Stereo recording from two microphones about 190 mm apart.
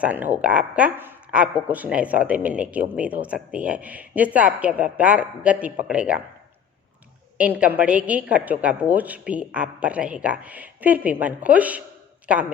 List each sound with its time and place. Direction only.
0.0 s speech: 10° right (ahead or behind)
7.3 s speech: 5° right (ahead or behind)